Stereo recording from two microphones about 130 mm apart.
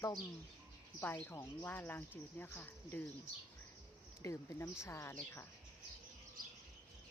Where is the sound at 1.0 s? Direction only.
15° left (ahead or behind).